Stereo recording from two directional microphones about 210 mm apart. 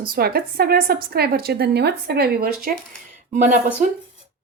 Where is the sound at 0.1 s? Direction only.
45° right (ahead or behind).